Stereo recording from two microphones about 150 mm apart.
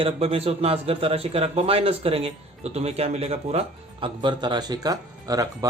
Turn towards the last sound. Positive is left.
turn(degrees=-25)  # may be behind; listen again after turning